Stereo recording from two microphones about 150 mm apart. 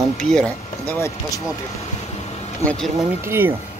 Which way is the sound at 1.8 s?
45° left (ahead or behind).